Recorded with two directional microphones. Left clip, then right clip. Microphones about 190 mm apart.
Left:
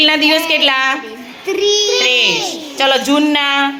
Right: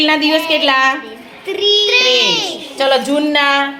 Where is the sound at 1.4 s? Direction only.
60° left (ahead or behind).